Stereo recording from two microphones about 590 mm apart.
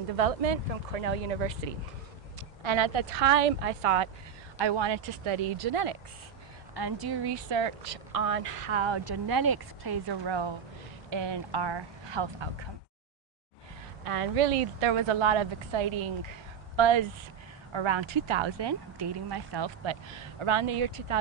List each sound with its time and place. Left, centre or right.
0.1 s speech: right
2.6 s a woman's voice: right
4.6 s a woman's voice: right
6.7 s speech: right
14.0 s speech: right